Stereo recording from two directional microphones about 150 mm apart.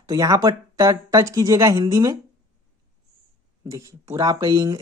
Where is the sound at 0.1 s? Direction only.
25° right (ahead or behind).